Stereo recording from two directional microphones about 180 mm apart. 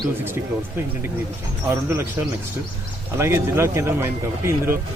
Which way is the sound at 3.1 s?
15° right (ahead or behind).